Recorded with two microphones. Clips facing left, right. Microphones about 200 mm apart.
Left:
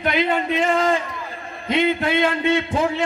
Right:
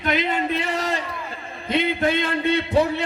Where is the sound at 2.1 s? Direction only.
50° left (ahead or behind).